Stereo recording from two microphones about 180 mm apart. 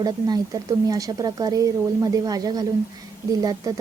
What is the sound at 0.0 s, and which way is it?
A woman's voice, 20° right (ahead or behind).